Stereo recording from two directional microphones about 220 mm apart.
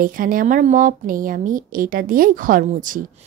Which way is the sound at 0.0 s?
40° right (ahead or behind).